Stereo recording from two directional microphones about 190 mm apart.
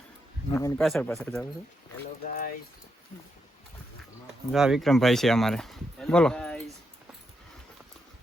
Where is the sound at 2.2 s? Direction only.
45° left (ahead or behind).